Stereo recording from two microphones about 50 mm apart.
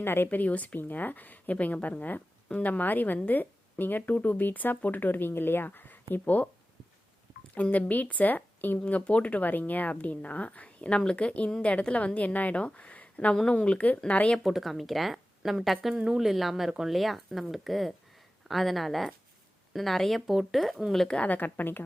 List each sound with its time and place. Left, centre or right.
0.0 s speech: left
0.3 s speech: left
7.5 s speech: left
8.8 s speech: left
14.3 s speech: centre
16.0 s speech: centre
21.1 s speech: left